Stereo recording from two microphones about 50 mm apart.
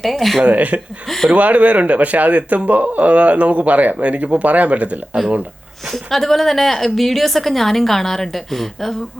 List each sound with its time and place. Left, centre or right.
0.0 s a woman's voice: centre
0.4 s speech: right
1.0 s speech: centre
1.3 s speech: right
5.9 s a woman's voice: centre